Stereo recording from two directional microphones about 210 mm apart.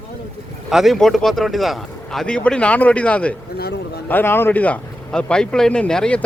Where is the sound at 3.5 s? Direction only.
45° left (ahead or behind).